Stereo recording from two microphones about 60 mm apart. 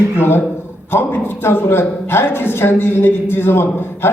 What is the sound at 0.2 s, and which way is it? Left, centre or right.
A woman's voice, left.